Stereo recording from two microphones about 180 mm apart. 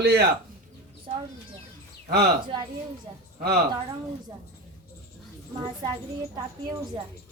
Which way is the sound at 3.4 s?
60° right (ahead or behind).